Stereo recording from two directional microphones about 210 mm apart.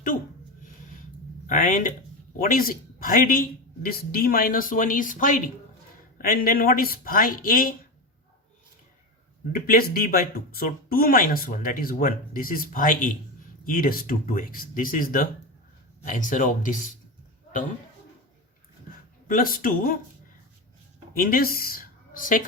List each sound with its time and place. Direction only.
1.5 s speech: 40° left (ahead or behind)
9.6 s speech: 45° left (ahead or behind)
19.3 s speech: 40° left (ahead or behind)
21.1 s speech: 45° left (ahead or behind)